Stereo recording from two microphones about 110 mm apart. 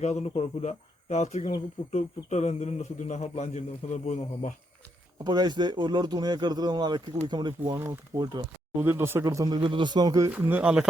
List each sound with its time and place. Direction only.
0.0 s a man's voice: 85° left
5.2 s speech: 40° right (ahead or behind)
7.8 s speech: 25° right (ahead or behind)
8.2 s speech: 40° right (ahead or behind)
8.8 s speech: 20° right (ahead or behind)
9.2 s speech: 35° right (ahead or behind)
9.6 s speech: 50° right (ahead or behind); by 10.3 s 35° right (ahead or behind)
10.4 s speech: 15° right (ahead or behind)